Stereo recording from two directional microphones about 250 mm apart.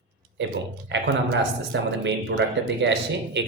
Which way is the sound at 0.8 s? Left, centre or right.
Right.